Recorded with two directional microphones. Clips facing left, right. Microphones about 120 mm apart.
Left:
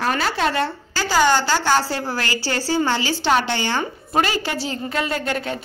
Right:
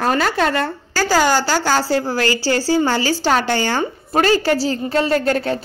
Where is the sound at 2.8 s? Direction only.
40° right (ahead or behind).